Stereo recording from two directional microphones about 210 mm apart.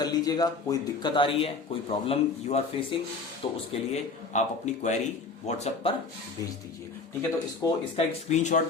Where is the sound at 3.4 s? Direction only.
25° left (ahead or behind).